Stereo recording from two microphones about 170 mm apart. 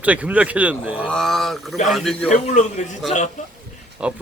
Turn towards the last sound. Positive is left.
turn(degrees=-5)  # may be behind; listen again after turning